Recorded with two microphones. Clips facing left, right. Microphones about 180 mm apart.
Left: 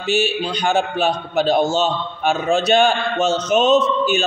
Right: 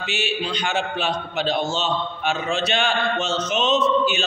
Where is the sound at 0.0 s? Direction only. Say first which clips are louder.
Left 7 dB; 45° left (ahead or behind).